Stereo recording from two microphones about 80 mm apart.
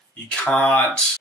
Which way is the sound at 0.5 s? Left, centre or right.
Left.